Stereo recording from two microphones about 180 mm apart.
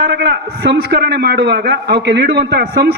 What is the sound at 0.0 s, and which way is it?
A man's voice, 65° right (ahead or behind).